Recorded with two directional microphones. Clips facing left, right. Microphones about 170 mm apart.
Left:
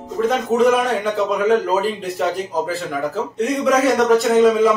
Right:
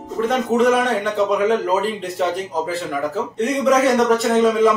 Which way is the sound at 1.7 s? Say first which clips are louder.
Left 1 dB; centre (ahead or behind).